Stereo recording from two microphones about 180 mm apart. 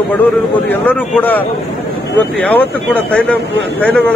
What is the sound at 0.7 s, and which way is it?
Speech, 10° left (ahead or behind).